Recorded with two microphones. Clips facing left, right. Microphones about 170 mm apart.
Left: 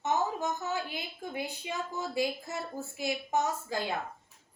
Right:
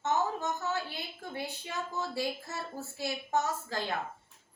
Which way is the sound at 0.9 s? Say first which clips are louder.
Left 2 dB; 15° left (ahead or behind).